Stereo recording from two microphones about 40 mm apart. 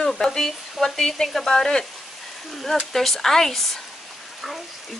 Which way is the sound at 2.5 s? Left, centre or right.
Centre.